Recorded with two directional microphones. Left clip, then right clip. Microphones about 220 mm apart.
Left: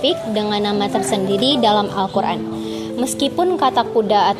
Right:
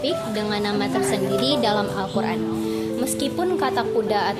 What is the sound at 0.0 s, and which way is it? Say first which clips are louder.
A woman's voice: left 6 dB; 25° left (ahead or behind).